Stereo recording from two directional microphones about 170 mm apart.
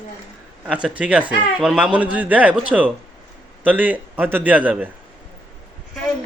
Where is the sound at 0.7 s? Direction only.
5° right (ahead or behind).